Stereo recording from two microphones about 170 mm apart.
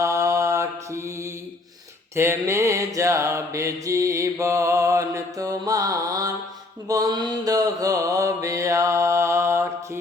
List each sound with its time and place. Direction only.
0.0 s mantra: 20° right (ahead or behind)